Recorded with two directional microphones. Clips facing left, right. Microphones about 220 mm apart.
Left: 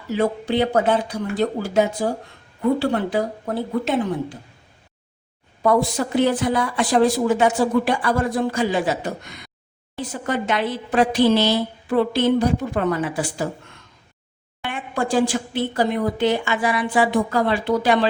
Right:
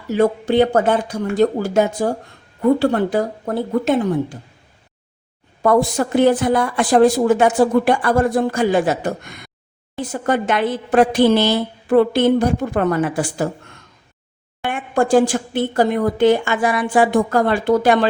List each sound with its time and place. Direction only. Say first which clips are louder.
0.1 s a woman's voice: right 5 dB; 50° right (ahead or behind)
5.6 s a woman's voice: right 3 dB; 50° right (ahead or behind)
14.6 s a woman's voice: right 6 dB; 50° right (ahead or behind)